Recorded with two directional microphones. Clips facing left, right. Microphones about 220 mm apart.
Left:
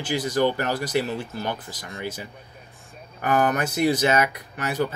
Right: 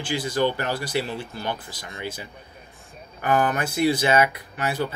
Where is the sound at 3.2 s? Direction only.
45° left (ahead or behind).